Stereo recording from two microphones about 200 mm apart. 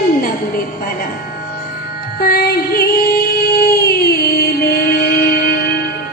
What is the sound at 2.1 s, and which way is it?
Music, 50° left (ahead or behind).